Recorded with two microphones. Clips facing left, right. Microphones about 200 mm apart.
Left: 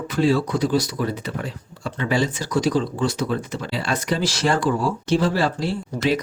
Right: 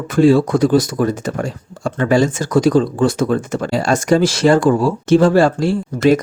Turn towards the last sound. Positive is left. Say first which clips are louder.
# right 9 dB
turn(degrees=-50)  # may be behind; listen again after turning